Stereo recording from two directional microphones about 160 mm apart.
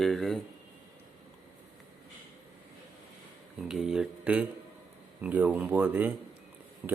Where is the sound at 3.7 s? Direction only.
5° right (ahead or behind).